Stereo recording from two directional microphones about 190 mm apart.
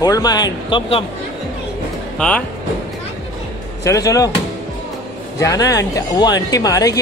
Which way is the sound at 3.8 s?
15° left (ahead or behind).